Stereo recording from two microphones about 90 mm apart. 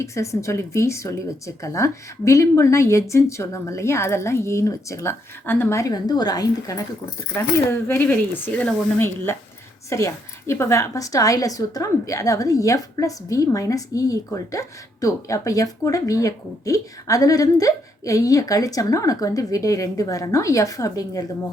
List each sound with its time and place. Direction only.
0.0 s a woman's voice: 35° left (ahead or behind)
5.7 s a woman's voice: 45° left (ahead or behind)
7.3 s a woman's voice: 30° left (ahead or behind); by 21.2 s 45° left (ahead or behind)